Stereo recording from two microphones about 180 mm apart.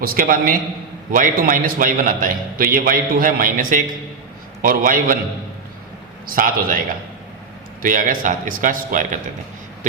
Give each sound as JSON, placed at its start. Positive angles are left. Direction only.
{"t": 0.0, "sound": "a man's voice", "side_deg": -55}
{"t": 6.2, "sound": "a man's voice", "side_deg": -50}